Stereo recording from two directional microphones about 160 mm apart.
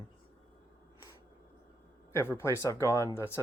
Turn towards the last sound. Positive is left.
turn(degrees=15)  # may be behind; listen again after turning